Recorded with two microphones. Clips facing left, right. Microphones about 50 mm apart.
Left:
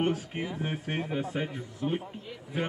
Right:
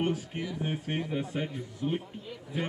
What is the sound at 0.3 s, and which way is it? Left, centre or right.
Speech, left.